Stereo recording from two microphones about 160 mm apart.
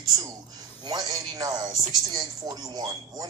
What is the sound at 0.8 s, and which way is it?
Speech, 25° right (ahead or behind).